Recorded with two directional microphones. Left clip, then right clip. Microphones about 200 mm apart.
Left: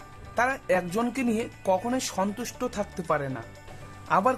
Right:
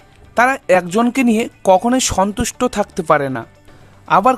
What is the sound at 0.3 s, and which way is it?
Speech, 50° right (ahead or behind).